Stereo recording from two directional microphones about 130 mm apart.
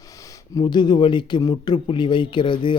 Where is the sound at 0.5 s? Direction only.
35° left (ahead or behind).